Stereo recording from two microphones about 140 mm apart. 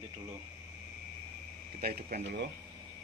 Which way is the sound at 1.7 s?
90° right.